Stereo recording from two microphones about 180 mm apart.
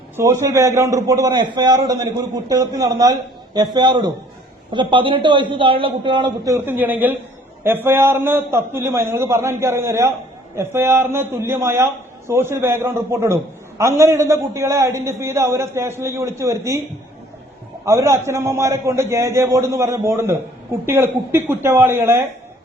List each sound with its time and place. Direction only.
0.2 s a man's voice: 15° right (ahead or behind)
17.8 s a man's voice: 15° right (ahead or behind)